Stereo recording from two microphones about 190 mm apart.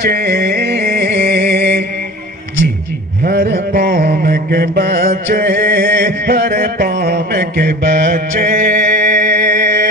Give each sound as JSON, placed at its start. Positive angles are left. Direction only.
{"t": 0.0, "sound": "music", "side_deg": -50}
{"t": 3.3, "sound": "mantra", "side_deg": -55}